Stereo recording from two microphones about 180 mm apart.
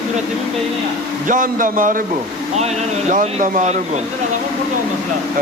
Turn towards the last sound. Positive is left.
turn(degrees=-45)  # may be behind; listen again after turning